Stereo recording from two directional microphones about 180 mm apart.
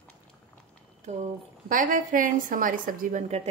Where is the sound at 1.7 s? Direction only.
50° right (ahead or behind).